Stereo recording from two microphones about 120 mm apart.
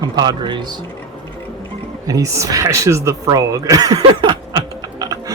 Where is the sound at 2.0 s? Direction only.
30° right (ahead or behind).